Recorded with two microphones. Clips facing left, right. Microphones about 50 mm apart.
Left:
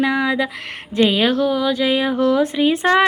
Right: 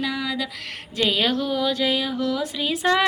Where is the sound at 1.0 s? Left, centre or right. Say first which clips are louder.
Left 6 dB; centre.